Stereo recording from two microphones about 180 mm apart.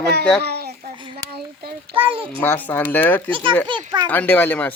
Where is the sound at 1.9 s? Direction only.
30° right (ahead or behind).